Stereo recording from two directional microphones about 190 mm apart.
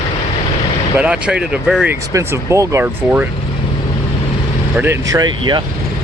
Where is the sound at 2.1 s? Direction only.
15° right (ahead or behind).